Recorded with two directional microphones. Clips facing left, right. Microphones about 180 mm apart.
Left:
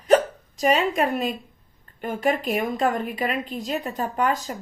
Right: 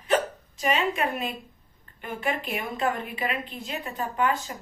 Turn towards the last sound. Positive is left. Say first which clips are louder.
# left 2 dB
turn(degrees=40)  # may be behind; listen again after turning